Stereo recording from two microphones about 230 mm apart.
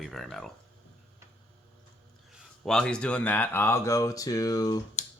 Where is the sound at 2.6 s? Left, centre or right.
Centre.